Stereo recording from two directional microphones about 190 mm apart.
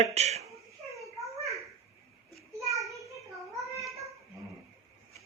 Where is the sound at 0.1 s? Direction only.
35° right (ahead or behind).